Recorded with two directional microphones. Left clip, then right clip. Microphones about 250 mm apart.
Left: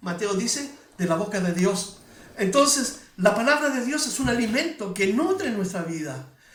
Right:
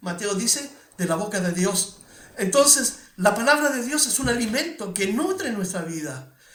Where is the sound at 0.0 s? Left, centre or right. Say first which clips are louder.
Even; right.